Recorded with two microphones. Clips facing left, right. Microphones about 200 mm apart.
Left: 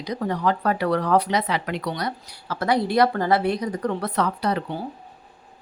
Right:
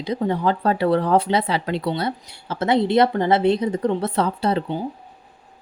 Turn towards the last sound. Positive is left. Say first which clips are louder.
# right 3 dB
turn(degrees=-25)  # may be behind; listen again after turning